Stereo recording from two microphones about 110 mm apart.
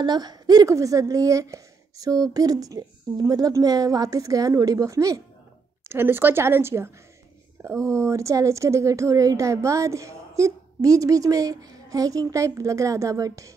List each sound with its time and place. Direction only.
0.0 s a woman's voice: 40° right (ahead or behind)
5.9 s speech: 20° right (ahead or behind)